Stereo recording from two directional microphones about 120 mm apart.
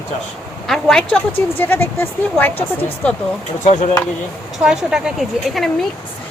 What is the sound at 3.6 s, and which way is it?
Speech, 90° left.